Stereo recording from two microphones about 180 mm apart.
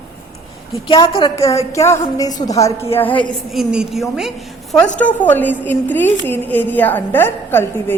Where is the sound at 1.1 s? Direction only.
30° left (ahead or behind).